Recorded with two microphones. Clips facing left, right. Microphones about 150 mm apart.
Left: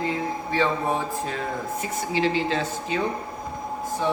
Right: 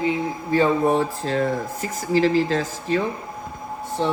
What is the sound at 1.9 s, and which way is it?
Speech, 40° right (ahead or behind).